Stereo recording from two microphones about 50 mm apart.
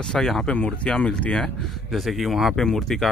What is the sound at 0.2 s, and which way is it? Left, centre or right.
Speech, centre.